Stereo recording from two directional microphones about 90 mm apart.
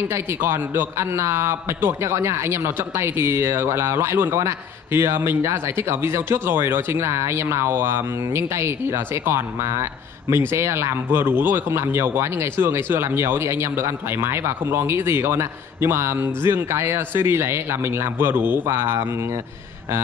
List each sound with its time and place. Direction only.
0.1 s a man's voice: 25° right (ahead or behind)